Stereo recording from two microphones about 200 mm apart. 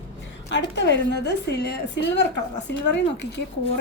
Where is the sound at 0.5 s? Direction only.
60° left (ahead or behind).